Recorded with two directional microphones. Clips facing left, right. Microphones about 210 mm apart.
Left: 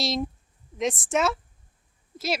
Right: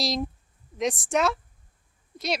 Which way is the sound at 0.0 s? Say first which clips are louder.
Even; centre (ahead or behind).